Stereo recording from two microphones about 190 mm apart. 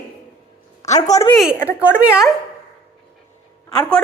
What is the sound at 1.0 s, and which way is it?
Speech, 35° left (ahead or behind).